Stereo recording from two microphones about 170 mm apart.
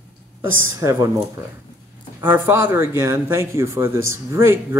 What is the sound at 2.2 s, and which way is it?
Speech, 10° right (ahead or behind).